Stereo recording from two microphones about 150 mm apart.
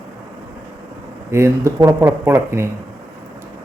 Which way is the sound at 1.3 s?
20° right (ahead or behind).